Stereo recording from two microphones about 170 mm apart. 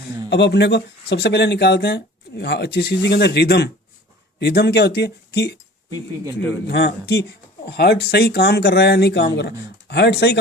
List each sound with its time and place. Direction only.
0.3 s speech: 90° left
6.7 s speech: 75° left (ahead or behind)